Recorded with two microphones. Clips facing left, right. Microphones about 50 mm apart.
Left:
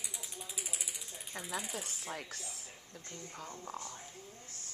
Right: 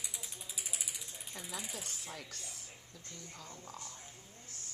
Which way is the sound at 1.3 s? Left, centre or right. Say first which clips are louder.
Left 5 dB; left.